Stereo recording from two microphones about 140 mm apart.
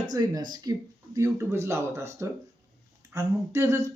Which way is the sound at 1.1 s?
20° right (ahead or behind).